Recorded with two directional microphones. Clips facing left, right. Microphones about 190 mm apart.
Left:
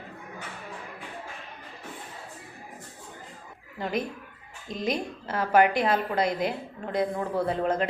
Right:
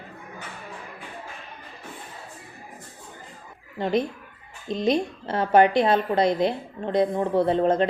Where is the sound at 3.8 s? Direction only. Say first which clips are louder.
Right 6 dB; 25° right (ahead or behind).